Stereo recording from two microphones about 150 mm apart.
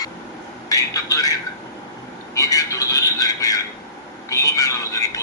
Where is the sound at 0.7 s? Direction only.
20° left (ahead or behind).